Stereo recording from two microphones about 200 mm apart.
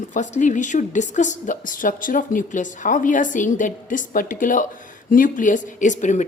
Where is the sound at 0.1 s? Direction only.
40° left (ahead or behind).